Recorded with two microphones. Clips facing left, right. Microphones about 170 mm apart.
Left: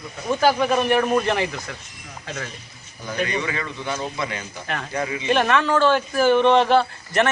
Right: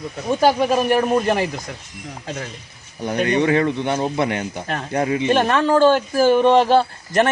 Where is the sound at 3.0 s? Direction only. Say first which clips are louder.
Right 7 dB; 60° right (ahead or behind).